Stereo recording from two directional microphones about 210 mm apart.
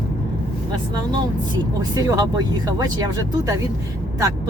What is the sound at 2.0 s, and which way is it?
Speech, 15° right (ahead or behind).